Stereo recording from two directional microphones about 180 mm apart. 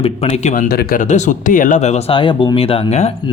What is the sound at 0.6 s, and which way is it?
Speech, 60° left (ahead or behind).